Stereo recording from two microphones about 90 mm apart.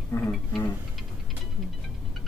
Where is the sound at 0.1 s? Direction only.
35° left (ahead or behind).